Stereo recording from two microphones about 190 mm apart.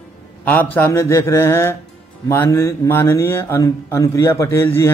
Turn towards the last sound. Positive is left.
turn(degrees=15)  # may be behind; listen again after turning